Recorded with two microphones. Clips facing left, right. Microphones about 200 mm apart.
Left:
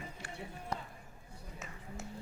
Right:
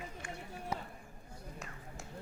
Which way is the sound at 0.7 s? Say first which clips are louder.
Right 1 dB; 10° right (ahead or behind).